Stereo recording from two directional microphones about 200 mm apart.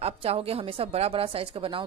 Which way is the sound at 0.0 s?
30° right (ahead or behind).